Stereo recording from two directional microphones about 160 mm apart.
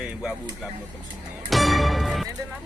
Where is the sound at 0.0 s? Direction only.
5° right (ahead or behind).